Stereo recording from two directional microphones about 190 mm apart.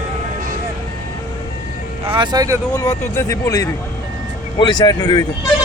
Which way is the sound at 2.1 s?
25° right (ahead or behind).